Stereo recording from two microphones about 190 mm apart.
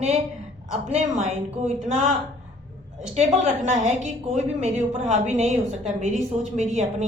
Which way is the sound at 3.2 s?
40° right (ahead or behind).